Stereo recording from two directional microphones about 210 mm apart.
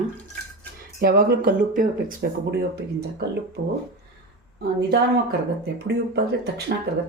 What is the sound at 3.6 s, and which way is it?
Speech, 60° right (ahead or behind).